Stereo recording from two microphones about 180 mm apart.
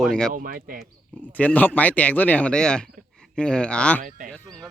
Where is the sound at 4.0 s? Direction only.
45° right (ahead or behind).